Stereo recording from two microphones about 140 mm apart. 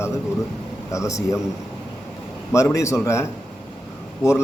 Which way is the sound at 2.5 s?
20° left (ahead or behind).